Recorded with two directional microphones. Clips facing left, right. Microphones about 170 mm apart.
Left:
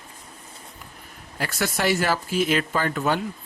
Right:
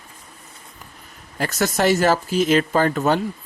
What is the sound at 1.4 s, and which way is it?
Speech, 45° right (ahead or behind).